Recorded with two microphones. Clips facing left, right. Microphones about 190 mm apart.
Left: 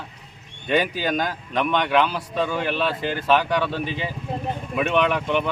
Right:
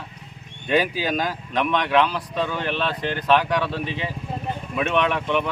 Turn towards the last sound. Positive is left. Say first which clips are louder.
# left 1 dB
turn(degrees=0)  # may be behind; listen again after turning